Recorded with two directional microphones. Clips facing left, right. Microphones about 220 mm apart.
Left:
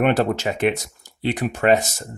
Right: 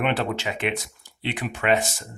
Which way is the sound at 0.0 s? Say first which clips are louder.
Left 6 dB; 45° left (ahead or behind).